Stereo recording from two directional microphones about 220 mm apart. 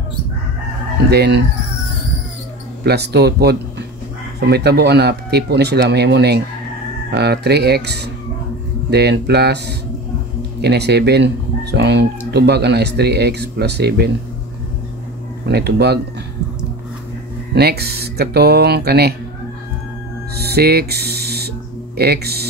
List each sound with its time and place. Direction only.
1.1 s speech: 50° right (ahead or behind)
2.8 s speech: 45° right (ahead or behind)
15.4 s speech: 50° right (ahead or behind)
17.6 s speech: 45° right (ahead or behind)
20.3 s music: 45° right (ahead or behind)
21.9 s speech: 45° right (ahead or behind)